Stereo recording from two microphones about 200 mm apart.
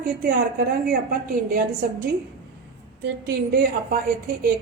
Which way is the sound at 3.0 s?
55° right (ahead or behind).